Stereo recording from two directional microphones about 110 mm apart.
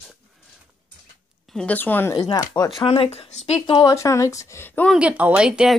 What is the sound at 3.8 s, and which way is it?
Speech, 30° left (ahead or behind).